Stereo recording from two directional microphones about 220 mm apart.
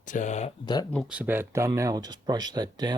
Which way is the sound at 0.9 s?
Centre (ahead or behind).